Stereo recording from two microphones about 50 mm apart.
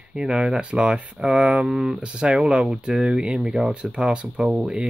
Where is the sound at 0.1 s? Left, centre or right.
Centre.